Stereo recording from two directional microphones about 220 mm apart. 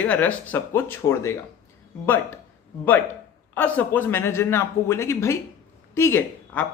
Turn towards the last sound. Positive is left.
turn(degrees=10)  # may be behind; listen again after turning